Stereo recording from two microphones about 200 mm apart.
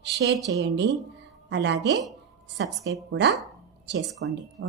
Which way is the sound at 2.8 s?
15° right (ahead or behind).